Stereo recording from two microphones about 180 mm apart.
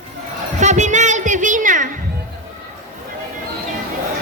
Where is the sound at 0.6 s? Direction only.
40° right (ahead or behind).